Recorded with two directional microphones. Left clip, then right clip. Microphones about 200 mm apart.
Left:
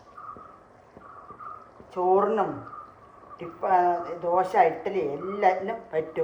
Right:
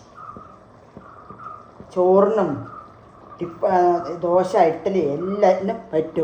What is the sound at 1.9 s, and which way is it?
Speech, 60° right (ahead or behind).